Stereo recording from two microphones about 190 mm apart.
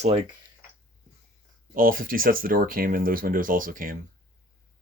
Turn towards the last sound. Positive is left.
turn(degrees=-45)  # may be behind; listen again after turning